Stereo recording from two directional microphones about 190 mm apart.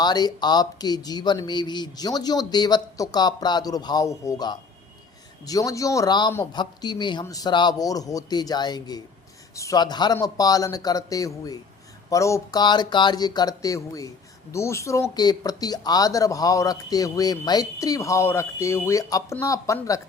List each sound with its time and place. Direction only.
0.0 s speech: 20° left (ahead or behind)